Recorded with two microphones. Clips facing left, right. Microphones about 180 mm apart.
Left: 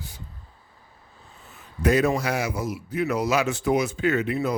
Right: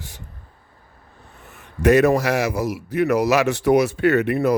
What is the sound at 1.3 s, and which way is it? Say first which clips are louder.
A man's voice: right 4 dB; 65° right (ahead or behind).